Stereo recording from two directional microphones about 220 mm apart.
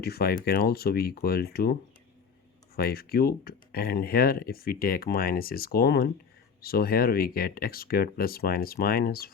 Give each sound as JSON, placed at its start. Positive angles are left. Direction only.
{"t": 0.0, "sound": "speech", "side_deg": 45}
{"t": 2.7, "sound": "speech", "side_deg": 45}